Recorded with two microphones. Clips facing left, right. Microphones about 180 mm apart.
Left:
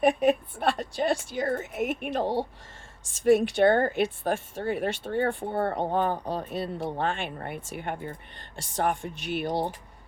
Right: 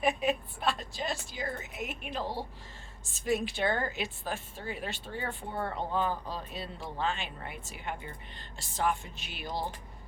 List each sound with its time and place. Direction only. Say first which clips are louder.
0.0 s speech: left 7 dB; 55° left (ahead or behind)
3.6 s speech: left 10 dB; 60° left (ahead or behind)